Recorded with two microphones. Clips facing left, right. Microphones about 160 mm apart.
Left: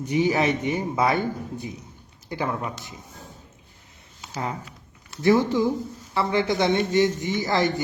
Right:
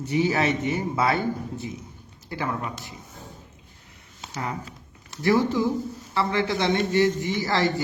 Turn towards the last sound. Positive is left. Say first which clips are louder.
# left 1 dB
turn(degrees=20)  # may be behind; listen again after turning